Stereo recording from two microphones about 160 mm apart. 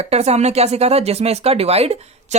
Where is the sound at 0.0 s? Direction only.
40° right (ahead or behind).